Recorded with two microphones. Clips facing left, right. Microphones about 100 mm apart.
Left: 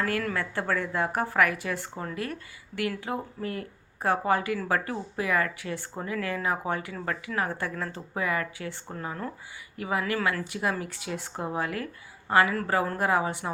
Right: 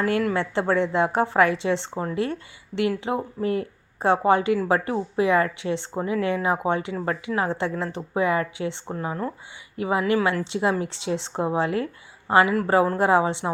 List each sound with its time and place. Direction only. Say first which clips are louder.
0.0 s speech: right 6 dB; 20° right (ahead or behind)